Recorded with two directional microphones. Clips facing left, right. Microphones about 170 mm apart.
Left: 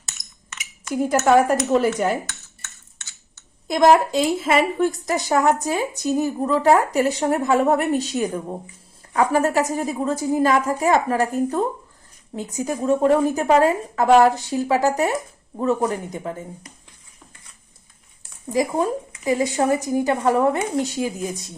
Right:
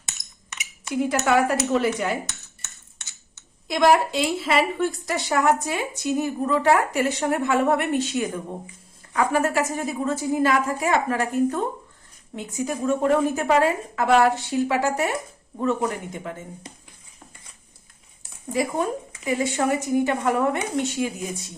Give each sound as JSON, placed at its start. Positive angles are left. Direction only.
{"t": 0.9, "sound": "a woman's voice", "side_deg": 40}
{"t": 3.7, "sound": "a woman's voice", "side_deg": 45}
{"t": 18.5, "sound": "a woman's voice", "side_deg": 40}